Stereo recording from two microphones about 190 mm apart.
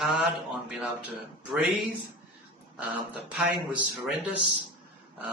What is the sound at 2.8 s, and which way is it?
A man's voice, 5° right (ahead or behind).